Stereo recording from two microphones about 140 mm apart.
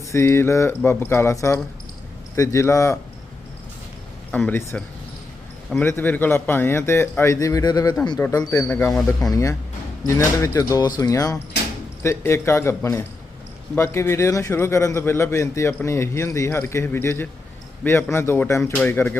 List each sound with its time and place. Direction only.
0.1 s a man's voice: 20° left (ahead or behind)
4.3 s a man's voice: 10° left (ahead or behind)
5.8 s a man's voice: 15° left (ahead or behind)